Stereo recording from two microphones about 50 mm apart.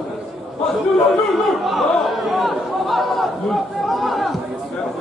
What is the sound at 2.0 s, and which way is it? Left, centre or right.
Chatter, centre.